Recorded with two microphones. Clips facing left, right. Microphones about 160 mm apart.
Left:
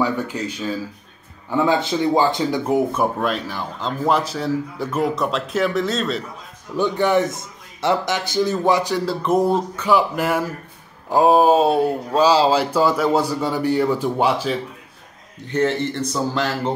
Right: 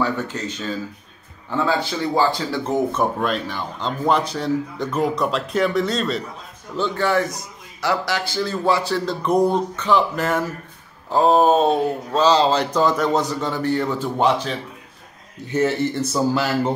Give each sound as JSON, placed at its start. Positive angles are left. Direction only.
{"t": 0.0, "sound": "speech", "side_deg": 10}
{"t": 6.8, "sound": "a man's voice", "side_deg": 20}
{"t": 15.4, "sound": "speech", "side_deg": -10}